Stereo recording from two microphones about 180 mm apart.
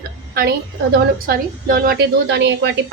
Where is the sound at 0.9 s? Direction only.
55° right (ahead or behind).